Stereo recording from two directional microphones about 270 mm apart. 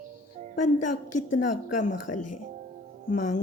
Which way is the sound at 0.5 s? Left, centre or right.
Left.